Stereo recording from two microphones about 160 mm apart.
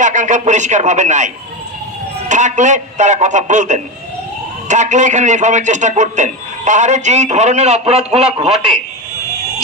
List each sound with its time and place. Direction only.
0.0 s a man's voice: 50° right (ahead or behind)
2.3 s a man's voice: 50° right (ahead or behind)